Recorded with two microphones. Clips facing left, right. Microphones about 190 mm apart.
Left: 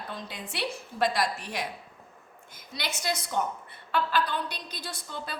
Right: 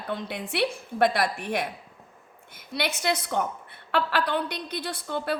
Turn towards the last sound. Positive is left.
turn(degrees=-60)  # may be behind; listen again after turning